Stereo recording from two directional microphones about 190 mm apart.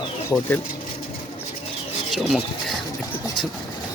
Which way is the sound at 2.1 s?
Centre (ahead or behind).